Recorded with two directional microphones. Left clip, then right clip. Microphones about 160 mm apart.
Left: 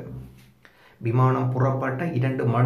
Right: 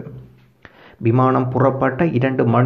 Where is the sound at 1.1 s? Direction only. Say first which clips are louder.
Right 7 dB; 25° right (ahead or behind).